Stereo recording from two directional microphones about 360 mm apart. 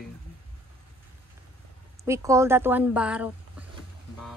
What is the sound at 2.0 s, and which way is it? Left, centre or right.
A woman's voice, centre.